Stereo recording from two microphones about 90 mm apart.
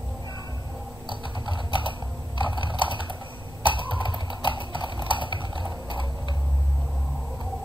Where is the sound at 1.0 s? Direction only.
60° left (ahead or behind).